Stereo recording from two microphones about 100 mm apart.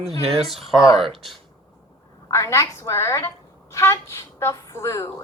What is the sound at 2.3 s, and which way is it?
Speech, 30° left (ahead or behind).